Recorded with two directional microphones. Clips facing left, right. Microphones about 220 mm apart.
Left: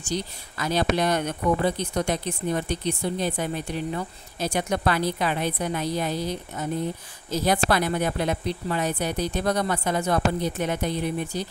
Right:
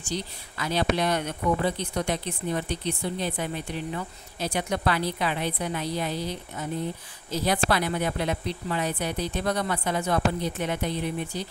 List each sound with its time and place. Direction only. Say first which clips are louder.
0.0 s speech: left 3 dB; 45° left (ahead or behind)